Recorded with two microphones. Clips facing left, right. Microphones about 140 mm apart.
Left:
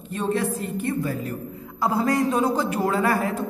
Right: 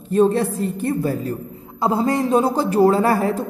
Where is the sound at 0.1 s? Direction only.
35° right (ahead or behind).